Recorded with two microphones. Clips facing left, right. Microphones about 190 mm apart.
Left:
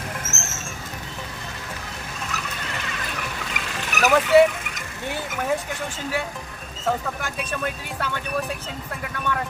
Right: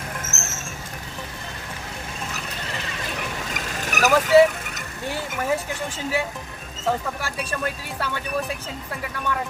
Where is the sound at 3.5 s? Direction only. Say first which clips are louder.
Right 1 dB; 45° right (ahead or behind).